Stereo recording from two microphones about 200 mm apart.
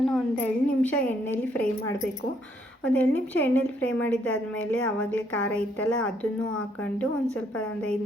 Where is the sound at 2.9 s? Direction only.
10° left (ahead or behind).